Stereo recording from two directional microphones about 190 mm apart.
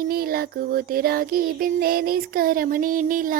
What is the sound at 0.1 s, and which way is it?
Child singing, 50° right (ahead or behind).